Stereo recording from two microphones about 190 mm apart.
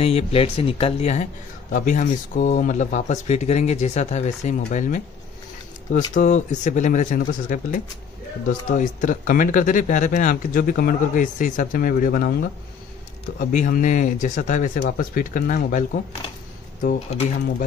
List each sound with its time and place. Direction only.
0.0 s speech: 30° left (ahead or behind)
6.1 s speech: 40° left (ahead or behind)